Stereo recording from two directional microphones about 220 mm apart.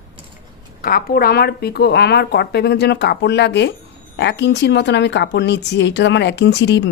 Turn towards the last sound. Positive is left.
turn(degrees=50)  # may be behind; listen again after turning